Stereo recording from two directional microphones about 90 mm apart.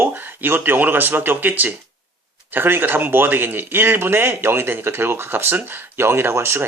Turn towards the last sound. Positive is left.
turn(degrees=-25)  # may be behind; listen again after turning